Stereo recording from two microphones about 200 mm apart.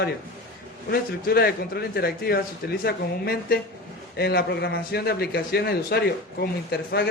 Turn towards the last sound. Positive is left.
turn(degrees=55)  # may be behind; listen again after turning